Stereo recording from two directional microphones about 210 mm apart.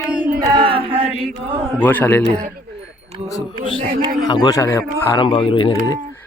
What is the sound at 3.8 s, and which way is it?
Speech, 25° right (ahead or behind).